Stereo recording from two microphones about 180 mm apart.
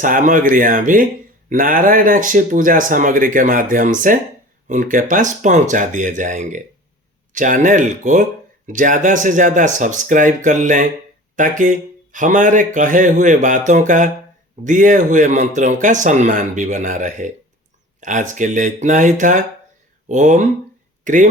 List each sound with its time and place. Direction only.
0.0 s speech: 45° right (ahead or behind)